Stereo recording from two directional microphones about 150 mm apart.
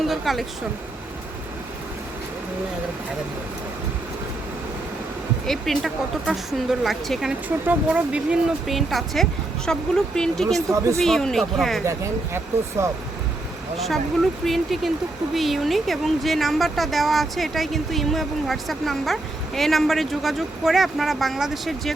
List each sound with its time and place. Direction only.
0.0 s speech: centre (ahead or behind)
5.5 s speech: centre (ahead or behind)
10.7 s speech: 20° right (ahead or behind)
11.0 s speech: centre (ahead or behind)
11.9 s speech: 20° right (ahead or behind)
13.7 s speech: centre (ahead or behind)